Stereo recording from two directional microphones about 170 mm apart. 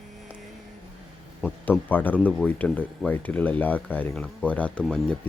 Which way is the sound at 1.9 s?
10° left (ahead or behind).